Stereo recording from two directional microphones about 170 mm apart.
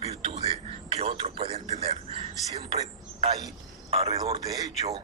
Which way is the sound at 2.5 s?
40° right (ahead or behind).